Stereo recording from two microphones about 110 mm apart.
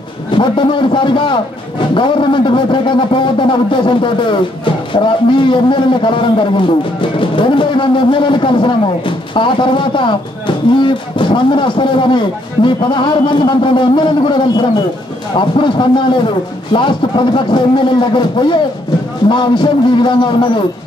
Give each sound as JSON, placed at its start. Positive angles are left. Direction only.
{"t": 0.4, "sound": "a man's voice", "side_deg": 50}